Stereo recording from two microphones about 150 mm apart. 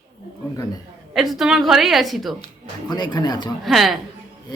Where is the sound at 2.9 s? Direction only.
30° left (ahead or behind).